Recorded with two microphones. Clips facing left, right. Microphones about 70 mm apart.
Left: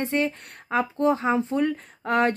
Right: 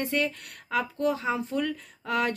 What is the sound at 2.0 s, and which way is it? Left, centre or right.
Speech, left.